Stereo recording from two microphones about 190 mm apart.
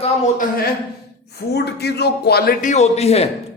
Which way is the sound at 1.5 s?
60° left (ahead or behind).